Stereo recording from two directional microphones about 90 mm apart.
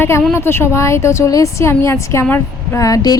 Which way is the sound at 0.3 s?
30° left (ahead or behind).